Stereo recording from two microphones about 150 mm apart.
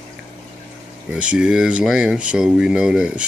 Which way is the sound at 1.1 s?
5° right (ahead or behind).